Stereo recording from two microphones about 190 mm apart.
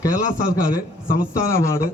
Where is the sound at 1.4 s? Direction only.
15° left (ahead or behind).